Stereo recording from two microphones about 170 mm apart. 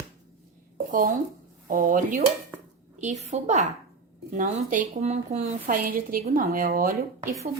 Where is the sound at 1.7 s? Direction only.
50° right (ahead or behind).